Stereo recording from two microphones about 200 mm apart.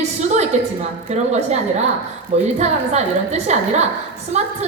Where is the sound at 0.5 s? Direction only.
35° right (ahead or behind).